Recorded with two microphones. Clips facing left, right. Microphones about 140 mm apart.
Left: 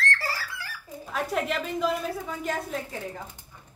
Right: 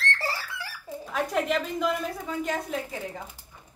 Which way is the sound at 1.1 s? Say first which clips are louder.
Right 2 dB; centre (ahead or behind).